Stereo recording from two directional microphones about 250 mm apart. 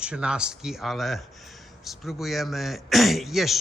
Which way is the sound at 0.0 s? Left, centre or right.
Centre.